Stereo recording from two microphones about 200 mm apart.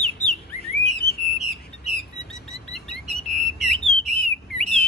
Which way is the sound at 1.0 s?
50° left (ahead or behind).